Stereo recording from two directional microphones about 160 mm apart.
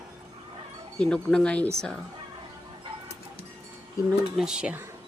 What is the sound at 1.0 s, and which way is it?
Speech, 5° left (ahead or behind).